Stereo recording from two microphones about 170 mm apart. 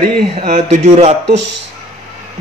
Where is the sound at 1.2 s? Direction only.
90° right.